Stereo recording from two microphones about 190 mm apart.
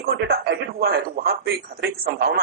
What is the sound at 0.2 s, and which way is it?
Speech, 55° right (ahead or behind).